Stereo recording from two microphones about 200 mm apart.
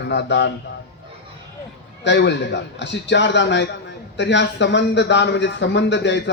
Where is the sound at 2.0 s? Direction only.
60° left (ahead or behind).